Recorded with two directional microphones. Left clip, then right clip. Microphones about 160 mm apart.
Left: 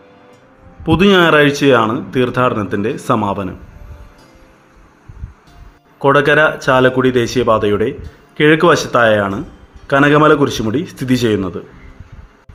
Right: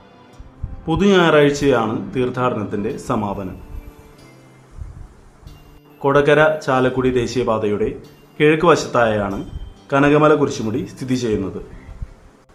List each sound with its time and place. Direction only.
0.9 s speech: 30° left (ahead or behind)
6.0 s speech: 30° left (ahead or behind)